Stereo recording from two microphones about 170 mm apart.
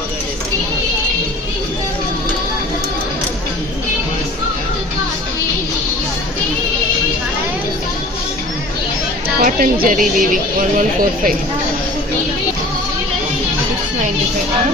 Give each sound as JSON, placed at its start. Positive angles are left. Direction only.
{"t": 9.4, "sound": "speech", "side_deg": -55}